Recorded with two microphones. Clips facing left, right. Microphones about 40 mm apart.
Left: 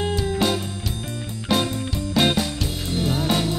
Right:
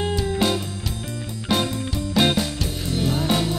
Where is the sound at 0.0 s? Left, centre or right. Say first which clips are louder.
Even; centre.